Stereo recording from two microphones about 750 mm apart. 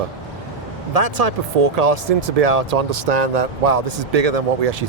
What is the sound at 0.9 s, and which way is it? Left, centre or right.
Speech, right.